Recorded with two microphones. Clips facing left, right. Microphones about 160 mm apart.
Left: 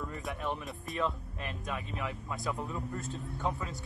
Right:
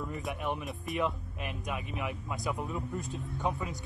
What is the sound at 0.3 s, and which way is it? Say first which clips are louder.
Speech: right 1 dB; 15° right (ahead or behind).